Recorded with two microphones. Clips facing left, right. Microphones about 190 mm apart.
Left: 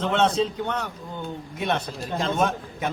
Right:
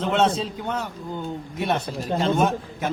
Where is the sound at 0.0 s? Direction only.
5° right (ahead or behind).